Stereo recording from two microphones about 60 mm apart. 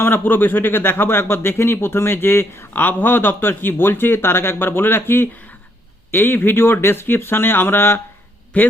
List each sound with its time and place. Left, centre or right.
0.0 s speech: left
8.5 s a man's voice: left